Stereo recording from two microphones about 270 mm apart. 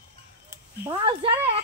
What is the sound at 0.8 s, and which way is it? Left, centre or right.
Speech, centre.